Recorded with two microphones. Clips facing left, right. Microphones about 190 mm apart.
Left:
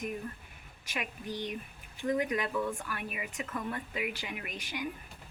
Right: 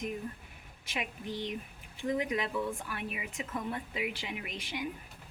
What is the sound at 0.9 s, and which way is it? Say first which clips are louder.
Speech: even; 25° right (ahead or behind).